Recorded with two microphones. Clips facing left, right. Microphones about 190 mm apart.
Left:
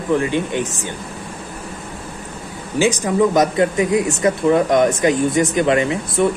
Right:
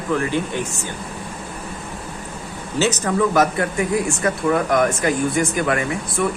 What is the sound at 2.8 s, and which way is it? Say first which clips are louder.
Speech: left 3 dB; 10° left (ahead or behind).